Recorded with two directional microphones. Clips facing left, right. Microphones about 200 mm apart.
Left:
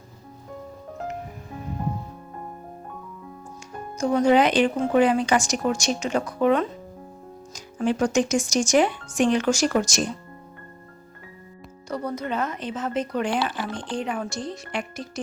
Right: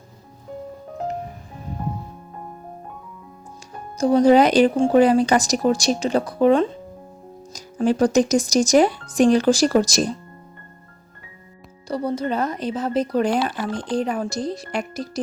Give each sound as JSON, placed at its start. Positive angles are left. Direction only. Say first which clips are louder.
{"t": 3.9, "sound": "speech", "louder": "right 5 dB", "side_deg": -35}
{"t": 11.9, "sound": "speech", "louder": "right 5 dB", "side_deg": -30}